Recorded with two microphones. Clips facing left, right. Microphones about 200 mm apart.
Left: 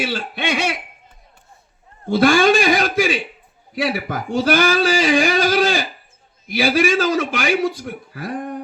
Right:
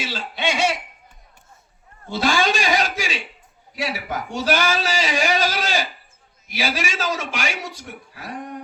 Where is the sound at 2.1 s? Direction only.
55° left (ahead or behind).